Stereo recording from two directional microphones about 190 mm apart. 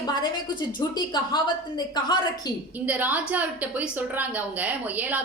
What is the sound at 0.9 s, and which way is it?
Speech, 20° left (ahead or behind).